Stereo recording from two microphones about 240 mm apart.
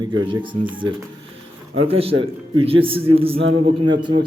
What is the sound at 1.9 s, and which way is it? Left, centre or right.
A man's voice, right.